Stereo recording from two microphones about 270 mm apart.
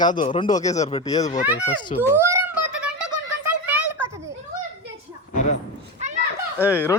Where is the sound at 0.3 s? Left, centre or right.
Left.